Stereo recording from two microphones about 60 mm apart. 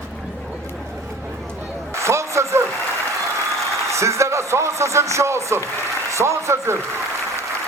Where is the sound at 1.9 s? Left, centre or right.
Right.